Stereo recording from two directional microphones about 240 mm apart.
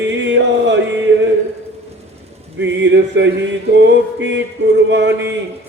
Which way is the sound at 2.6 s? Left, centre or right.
Right.